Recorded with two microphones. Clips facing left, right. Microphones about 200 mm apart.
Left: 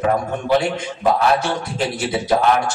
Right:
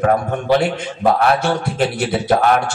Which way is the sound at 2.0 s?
60° right (ahead or behind).